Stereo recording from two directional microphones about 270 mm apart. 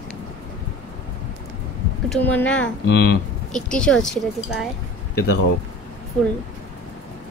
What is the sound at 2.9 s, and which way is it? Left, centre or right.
Speech, left.